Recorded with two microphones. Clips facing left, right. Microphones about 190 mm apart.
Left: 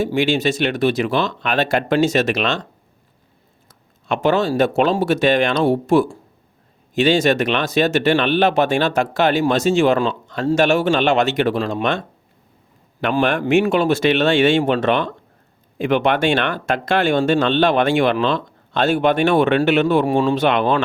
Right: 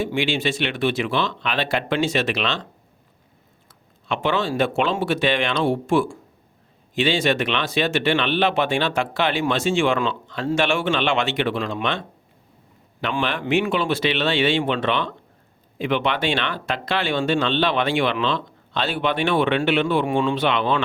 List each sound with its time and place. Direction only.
0.0 s speech: 40° left (ahead or behind)
4.0 s speech: 45° left (ahead or behind)